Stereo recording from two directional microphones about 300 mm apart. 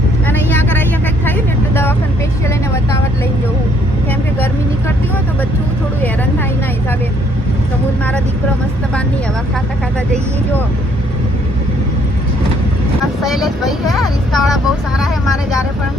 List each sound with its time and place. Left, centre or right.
0.3 s vehicle: centre
13.2 s vehicle: centre